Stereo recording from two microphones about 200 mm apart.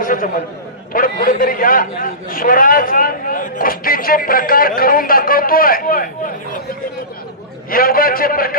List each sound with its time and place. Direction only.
0.0 s a sound: 45° left (ahead or behind)
0.9 s a man's voice: 45° left (ahead or behind)
7.7 s a man's voice: 45° left (ahead or behind)